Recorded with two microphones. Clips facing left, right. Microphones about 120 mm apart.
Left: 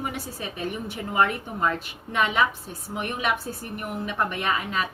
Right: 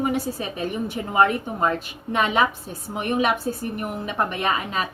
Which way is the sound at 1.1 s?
30° right (ahead or behind).